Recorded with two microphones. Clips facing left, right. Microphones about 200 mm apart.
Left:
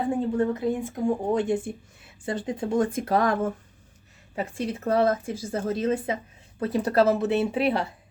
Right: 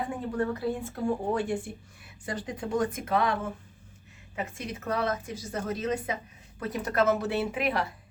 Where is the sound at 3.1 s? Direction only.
40° left (ahead or behind).